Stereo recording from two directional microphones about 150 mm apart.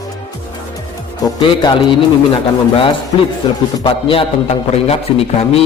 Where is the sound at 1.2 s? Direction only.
30° left (ahead or behind).